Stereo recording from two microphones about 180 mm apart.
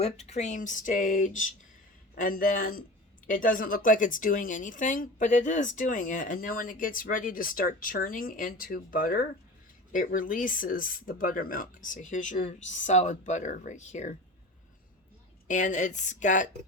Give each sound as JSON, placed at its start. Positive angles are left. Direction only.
{"t": 0.0, "sound": "speech", "side_deg": 40}
{"t": 15.4, "sound": "speech", "side_deg": 45}